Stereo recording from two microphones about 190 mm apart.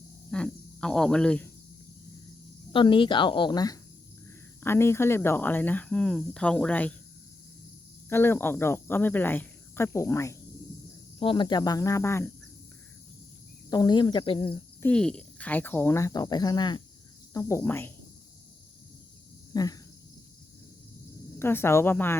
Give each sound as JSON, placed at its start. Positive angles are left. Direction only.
{"t": 0.3, "sound": "speech", "side_deg": 5}
{"t": 2.7, "sound": "speech", "side_deg": 25}
{"t": 8.1, "sound": "speech", "side_deg": 10}
{"t": 11.2, "sound": "speech", "side_deg": 25}
{"t": 13.7, "sound": "speech", "side_deg": 20}
{"t": 14.8, "sound": "speech", "side_deg": 5}
{"t": 19.5, "sound": "cricket", "side_deg": 20}
{"t": 21.3, "sound": "speech", "side_deg": 10}